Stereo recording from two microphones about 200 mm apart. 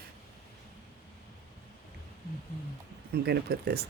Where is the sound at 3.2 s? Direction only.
55° right (ahead or behind).